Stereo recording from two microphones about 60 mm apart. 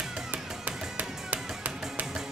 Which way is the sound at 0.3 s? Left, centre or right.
Right.